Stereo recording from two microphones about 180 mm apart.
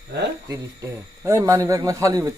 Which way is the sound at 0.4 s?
15° right (ahead or behind).